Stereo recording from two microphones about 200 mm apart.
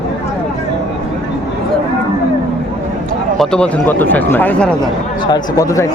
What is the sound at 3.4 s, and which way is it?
Speech, 5° left (ahead or behind).